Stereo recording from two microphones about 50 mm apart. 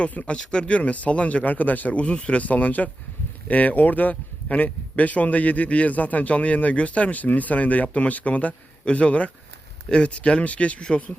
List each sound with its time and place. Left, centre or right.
0.0 s a man's voice: left
0.3 s speech: centre
0.7 s a man's voice: left
2.4 s a man's voice: left